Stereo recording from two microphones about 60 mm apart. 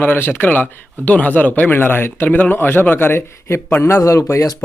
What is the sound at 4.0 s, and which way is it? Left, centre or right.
Speech, left.